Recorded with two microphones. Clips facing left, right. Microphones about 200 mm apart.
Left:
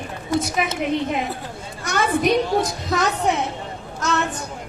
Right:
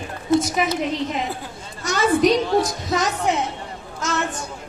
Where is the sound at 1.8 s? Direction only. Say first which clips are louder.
Right 2 dB; 55° left (ahead or behind).